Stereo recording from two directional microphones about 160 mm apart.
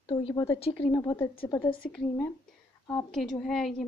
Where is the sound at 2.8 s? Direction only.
5° left (ahead or behind).